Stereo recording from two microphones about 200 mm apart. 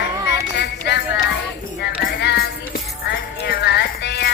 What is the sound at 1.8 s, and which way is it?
Music, 55° left (ahead or behind).